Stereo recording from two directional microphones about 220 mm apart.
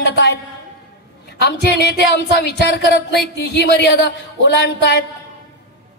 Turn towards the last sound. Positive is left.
turn(degrees=50)  # may be behind; listen again after turning